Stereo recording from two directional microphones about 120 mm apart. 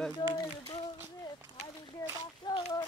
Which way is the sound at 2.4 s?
40° left (ahead or behind).